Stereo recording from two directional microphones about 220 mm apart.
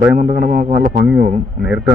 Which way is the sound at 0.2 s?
35° right (ahead or behind).